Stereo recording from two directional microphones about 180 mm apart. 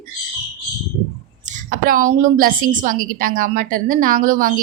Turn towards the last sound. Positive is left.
turn(degrees=-50)  # may be behind; listen again after turning